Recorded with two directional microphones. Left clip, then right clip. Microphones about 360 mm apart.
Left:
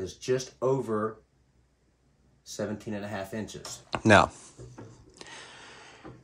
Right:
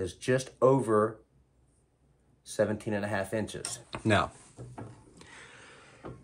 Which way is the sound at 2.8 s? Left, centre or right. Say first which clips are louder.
Right 4 dB; right.